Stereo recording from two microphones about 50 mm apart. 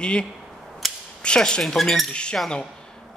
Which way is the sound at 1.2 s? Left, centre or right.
Centre.